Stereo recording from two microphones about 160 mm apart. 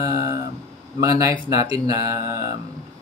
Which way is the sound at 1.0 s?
20° right (ahead or behind).